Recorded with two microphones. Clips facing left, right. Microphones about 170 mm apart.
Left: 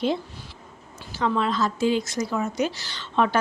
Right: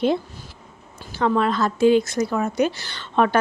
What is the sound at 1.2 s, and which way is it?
A woman's voice, 55° right (ahead or behind).